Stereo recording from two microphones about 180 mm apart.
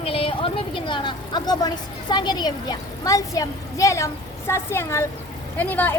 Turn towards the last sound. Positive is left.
turn(degrees=10)  # may be behind; listen again after turning